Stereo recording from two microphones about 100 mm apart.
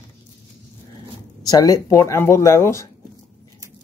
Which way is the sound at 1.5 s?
40° left (ahead or behind).